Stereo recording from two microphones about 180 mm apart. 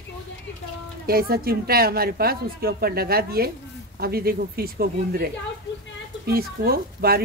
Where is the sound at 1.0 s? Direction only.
55° right (ahead or behind).